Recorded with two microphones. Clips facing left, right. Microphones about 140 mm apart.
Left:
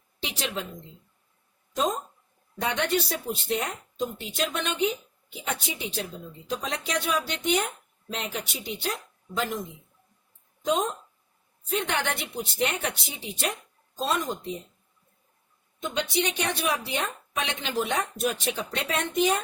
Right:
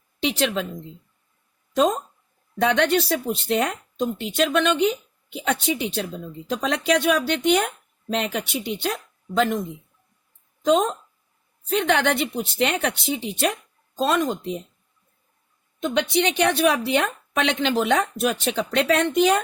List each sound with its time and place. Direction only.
0.2 s a woman's voice: 75° right (ahead or behind)
1.7 s a woman's voice: 70° right (ahead or behind)
10.7 s a woman's voice: 80° right
15.8 s a woman's voice: 70° right (ahead or behind); by 19.4 s 90° right